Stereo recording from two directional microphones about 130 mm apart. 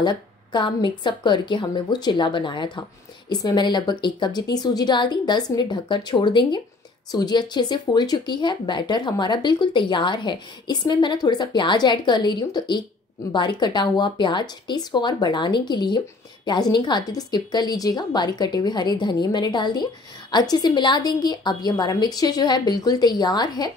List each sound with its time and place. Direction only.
0.0 s a woman's voice: 35° left (ahead or behind)